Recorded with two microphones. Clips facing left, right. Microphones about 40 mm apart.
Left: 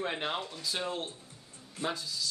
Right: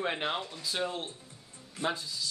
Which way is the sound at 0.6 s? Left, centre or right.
Centre.